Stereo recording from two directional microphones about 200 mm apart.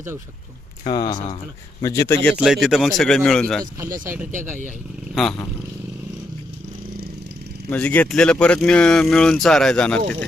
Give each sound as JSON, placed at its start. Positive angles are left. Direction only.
{"t": 0.9, "sound": "speech", "side_deg": 20}
{"t": 2.3, "sound": "speech", "side_deg": 0}
{"t": 3.8, "sound": "speech", "side_deg": -40}
{"t": 5.1, "sound": "speech", "side_deg": 0}
{"t": 7.7, "sound": "speech", "side_deg": 5}